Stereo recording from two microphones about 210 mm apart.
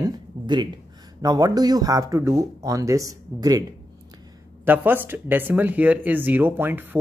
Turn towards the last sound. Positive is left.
turn(degrees=-10)  # may be behind; listen again after turning